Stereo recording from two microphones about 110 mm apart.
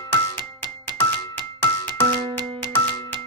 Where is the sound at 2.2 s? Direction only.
45° right (ahead or behind).